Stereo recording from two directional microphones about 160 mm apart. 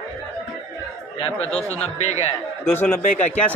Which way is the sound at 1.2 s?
40° left (ahead or behind).